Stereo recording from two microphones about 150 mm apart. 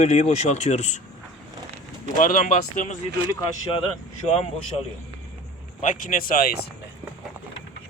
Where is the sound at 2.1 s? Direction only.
65° left (ahead or behind).